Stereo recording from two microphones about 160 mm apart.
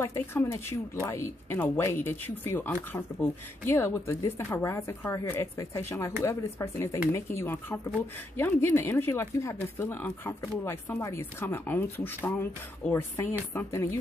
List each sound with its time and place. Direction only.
0.0 s speech: 15° left (ahead or behind)